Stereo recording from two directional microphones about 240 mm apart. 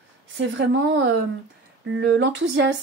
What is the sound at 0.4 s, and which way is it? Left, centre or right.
Speech, right.